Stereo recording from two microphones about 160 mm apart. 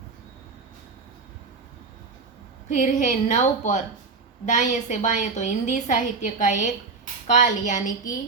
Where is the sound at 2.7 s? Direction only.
50° left (ahead or behind).